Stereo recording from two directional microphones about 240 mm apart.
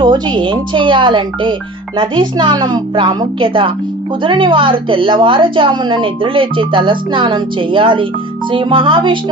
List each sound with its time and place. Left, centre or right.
0.0 s a woman's voice: centre